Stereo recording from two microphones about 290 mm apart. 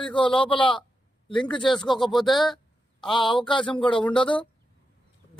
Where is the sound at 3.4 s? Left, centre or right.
Centre.